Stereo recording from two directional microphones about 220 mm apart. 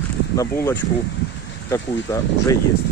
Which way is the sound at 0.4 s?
10° left (ahead or behind).